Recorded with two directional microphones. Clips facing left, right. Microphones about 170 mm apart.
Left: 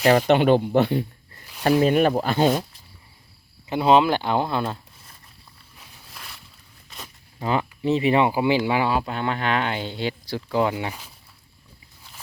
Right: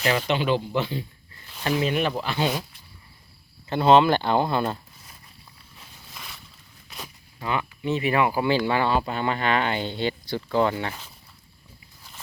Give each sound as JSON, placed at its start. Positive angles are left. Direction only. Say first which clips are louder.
{"t": 0.0, "sound": "speech", "louder": "left 7 dB", "side_deg": 45}
{"t": 1.8, "sound": "speech", "louder": "left 6 dB", "side_deg": 45}
{"t": 3.7, "sound": "speech", "louder": "even", "side_deg": 10}
{"t": 6.1, "sound": "a sound", "louder": "even", "side_deg": 0}
{"t": 7.3, "sound": "speech", "louder": "left 4 dB", "side_deg": 35}
{"t": 8.3, "sound": "speech", "louder": "left 2 dB", "side_deg": 15}